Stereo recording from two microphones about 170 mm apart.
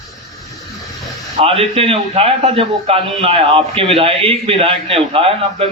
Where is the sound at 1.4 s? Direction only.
35° right (ahead or behind).